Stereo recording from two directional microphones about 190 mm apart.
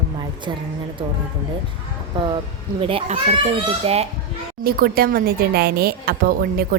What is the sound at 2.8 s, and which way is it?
A child's voice, 30° right (ahead or behind).